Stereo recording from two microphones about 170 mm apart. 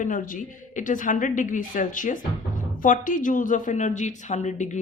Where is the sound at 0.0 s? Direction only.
50° left (ahead or behind).